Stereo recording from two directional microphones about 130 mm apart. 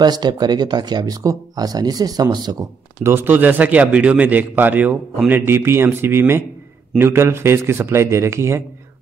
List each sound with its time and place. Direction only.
0.0 s speech: 30° right (ahead or behind)
3.0 s a man's voice: 15° right (ahead or behind)